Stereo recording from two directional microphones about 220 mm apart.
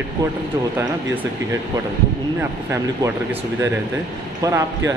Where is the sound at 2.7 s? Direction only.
10° right (ahead or behind).